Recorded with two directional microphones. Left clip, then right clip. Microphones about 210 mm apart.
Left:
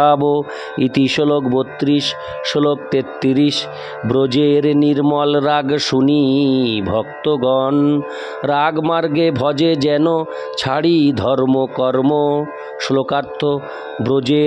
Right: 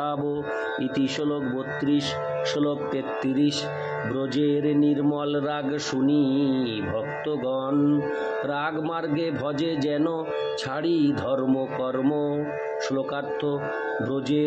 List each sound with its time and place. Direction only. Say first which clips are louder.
0.0 s speech: left 14 dB; 50° left (ahead or behind)